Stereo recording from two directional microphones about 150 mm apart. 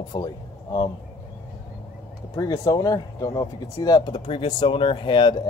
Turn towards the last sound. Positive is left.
turn(degrees=35)  # may be behind; listen again after turning